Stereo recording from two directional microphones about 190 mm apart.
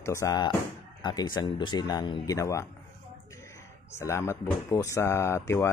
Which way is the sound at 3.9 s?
15° left (ahead or behind).